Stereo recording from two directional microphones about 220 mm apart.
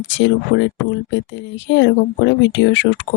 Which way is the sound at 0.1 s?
55° left (ahead or behind).